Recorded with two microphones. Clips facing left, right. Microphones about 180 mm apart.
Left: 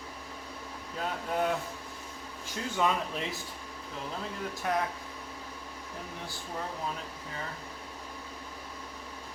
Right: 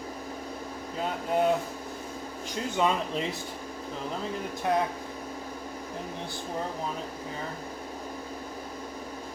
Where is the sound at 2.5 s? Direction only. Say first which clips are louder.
Right 3 dB; 20° right (ahead or behind).